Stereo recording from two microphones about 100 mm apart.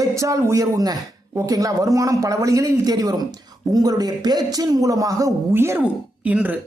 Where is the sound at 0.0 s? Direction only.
30° right (ahead or behind).